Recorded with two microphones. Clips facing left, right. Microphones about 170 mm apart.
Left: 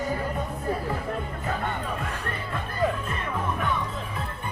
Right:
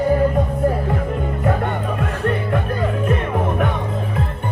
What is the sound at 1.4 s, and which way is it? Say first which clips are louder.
Music: right 9 dB; 60° right (ahead or behind).